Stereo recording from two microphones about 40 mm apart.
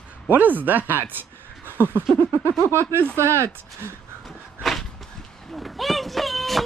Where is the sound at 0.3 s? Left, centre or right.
Right.